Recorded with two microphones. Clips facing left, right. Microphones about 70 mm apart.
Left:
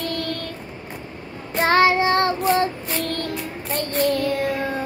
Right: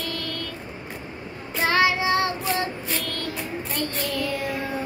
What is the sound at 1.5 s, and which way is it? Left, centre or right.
Child singing, left.